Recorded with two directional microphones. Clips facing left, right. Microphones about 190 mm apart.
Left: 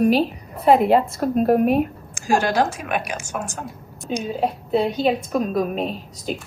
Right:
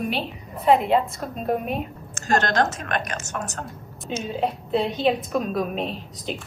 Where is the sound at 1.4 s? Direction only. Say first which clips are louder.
Left 8 dB; 55° left (ahead or behind).